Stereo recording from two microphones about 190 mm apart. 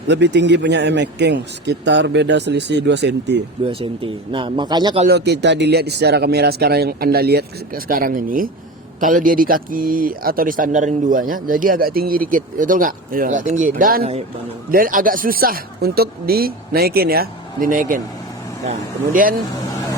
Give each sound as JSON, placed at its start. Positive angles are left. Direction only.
{"t": 0.1, "sound": "speech", "side_deg": -65}
{"t": 3.6, "sound": "speech", "side_deg": -30}
{"t": 5.0, "sound": "speech", "side_deg": -60}